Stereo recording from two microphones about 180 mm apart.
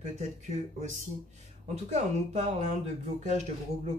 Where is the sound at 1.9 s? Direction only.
40° right (ahead or behind).